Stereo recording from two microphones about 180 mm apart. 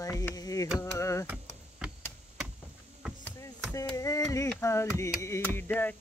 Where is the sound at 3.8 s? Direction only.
20° left (ahead or behind).